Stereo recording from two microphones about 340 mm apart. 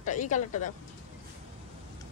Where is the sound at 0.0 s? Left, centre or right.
Left.